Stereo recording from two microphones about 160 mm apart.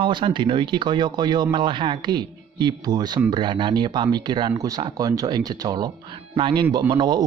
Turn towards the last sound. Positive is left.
turn(degrees=-25)  # may be behind; listen again after turning